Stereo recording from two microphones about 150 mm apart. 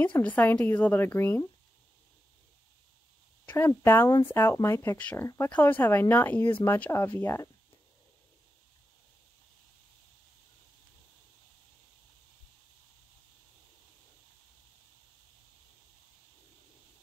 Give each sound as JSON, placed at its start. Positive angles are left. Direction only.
{"t": 0.0, "sound": "speech", "side_deg": 10}
{"t": 3.4, "sound": "speech", "side_deg": 15}